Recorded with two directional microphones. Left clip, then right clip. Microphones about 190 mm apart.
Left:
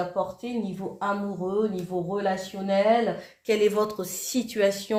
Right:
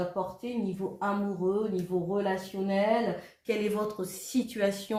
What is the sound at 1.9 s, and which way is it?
Speech, 50° left (ahead or behind).